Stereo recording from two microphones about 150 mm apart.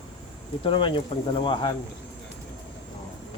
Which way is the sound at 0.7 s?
35° left (ahead or behind).